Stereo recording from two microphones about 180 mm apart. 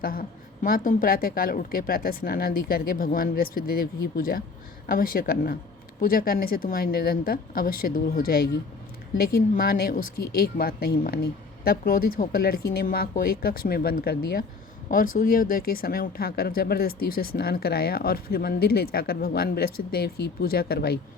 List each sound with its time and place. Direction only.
0.0 s a woman's voice: 55° left (ahead or behind)
14.8 s speech: 50° left (ahead or behind)